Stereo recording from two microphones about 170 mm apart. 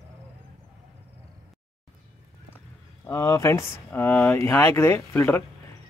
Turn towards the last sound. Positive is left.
turn(degrees=15)  # may be behind; listen again after turning